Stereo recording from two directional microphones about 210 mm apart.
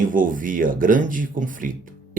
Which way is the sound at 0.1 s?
40° right (ahead or behind).